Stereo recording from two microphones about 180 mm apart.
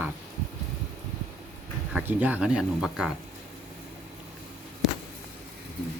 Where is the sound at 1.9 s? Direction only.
10° right (ahead or behind).